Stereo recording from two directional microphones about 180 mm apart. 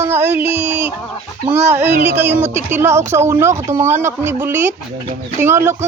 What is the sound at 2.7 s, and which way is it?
Speech, 15° right (ahead or behind).